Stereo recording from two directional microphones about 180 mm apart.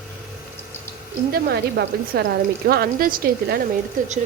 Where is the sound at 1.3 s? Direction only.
60° right (ahead or behind).